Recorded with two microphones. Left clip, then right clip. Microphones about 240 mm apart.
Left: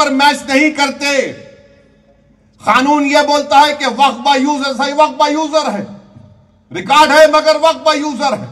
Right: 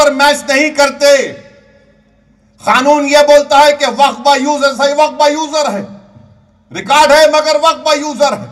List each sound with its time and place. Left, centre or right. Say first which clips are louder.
0.0 s a man's voice: right 2 dB; right
2.6 s a man's voice: right 2 dB; right